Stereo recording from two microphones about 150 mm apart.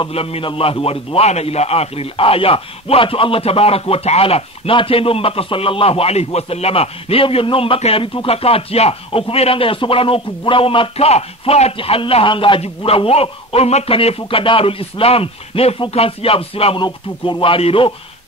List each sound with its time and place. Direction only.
0.0 s a man's voice: 40° left (ahead or behind)